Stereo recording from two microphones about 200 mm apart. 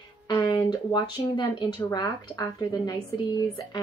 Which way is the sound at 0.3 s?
20° left (ahead or behind).